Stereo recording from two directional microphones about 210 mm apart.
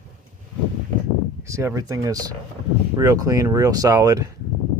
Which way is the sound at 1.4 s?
15° right (ahead or behind).